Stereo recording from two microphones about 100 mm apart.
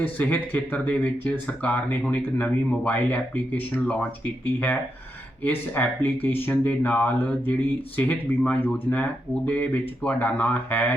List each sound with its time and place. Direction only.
0.0 s speech: 15° left (ahead or behind)
5.4 s speech: 15° left (ahead or behind)